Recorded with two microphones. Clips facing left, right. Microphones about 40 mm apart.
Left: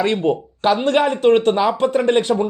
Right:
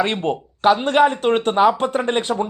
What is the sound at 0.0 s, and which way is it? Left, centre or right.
Speech, right.